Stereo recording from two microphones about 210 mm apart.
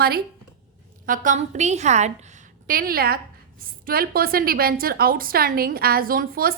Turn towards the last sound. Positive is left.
turn(degrees=-45)  # may be behind; listen again after turning